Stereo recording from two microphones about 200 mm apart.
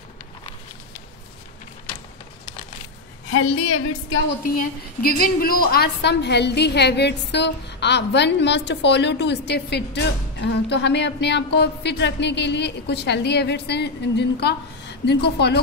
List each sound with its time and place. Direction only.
3.3 s a woman's voice: 80° left
4.6 s a woman's voice: 45° left (ahead or behind)